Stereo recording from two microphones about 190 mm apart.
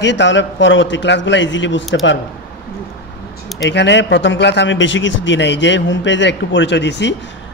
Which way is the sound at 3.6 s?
65° left (ahead or behind).